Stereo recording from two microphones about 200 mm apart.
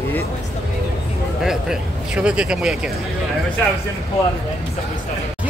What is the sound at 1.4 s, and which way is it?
Speech, 5° right (ahead or behind).